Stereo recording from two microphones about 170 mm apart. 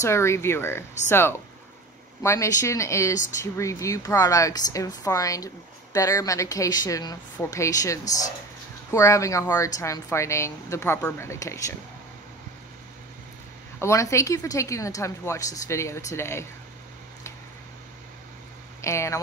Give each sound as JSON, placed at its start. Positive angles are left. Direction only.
{"t": 0.0, "sound": "a woman's voice", "side_deg": 15}
{"t": 13.7, "sound": "a woman's voice", "side_deg": 15}
{"t": 18.8, "sound": "speech", "side_deg": 15}